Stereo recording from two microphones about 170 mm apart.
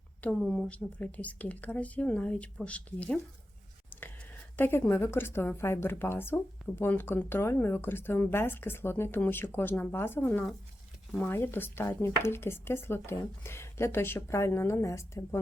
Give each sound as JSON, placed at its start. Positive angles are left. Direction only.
{"t": 0.2, "sound": "a woman's voice", "side_deg": 5}
{"t": 4.5, "sound": "a woman's voice", "side_deg": 10}